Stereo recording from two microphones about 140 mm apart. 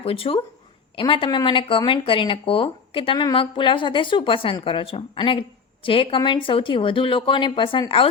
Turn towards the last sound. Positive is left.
turn(degrees=40)  # may be behind; listen again after turning